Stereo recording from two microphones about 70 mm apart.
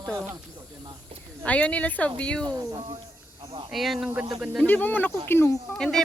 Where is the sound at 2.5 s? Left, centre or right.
Right.